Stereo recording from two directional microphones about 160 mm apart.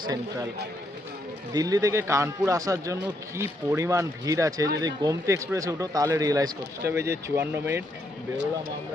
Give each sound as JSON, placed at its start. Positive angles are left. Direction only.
{"t": 1.5, "sound": "speech", "side_deg": -20}